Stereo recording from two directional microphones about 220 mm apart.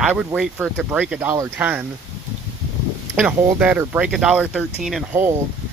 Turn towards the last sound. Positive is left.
turn(degrees=-5)  # may be behind; listen again after turning